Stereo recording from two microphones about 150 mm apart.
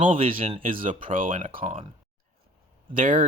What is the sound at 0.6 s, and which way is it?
Speech, 65° right (ahead or behind).